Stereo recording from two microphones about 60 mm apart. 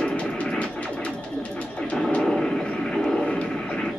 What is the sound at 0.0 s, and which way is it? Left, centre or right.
Music, centre.